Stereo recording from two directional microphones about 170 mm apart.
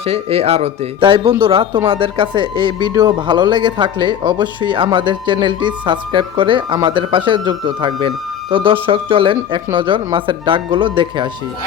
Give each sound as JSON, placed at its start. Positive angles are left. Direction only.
{"t": 0.0, "sound": "speech", "side_deg": -35}